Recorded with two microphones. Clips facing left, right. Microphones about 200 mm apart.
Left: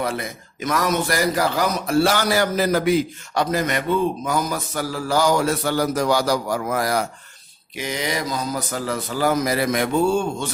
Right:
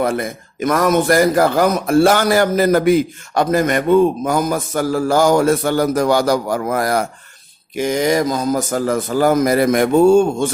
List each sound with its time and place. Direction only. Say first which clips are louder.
0.0 s a man's voice: right 7 dB; 50° right (ahead or behind)